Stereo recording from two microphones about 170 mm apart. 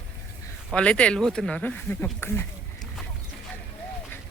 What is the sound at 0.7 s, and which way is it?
Speech, 5° left (ahead or behind).